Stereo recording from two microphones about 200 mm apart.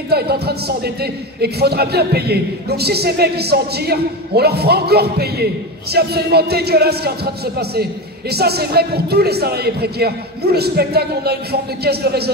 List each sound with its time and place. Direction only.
0.1 s a man's voice: 55° right (ahead or behind)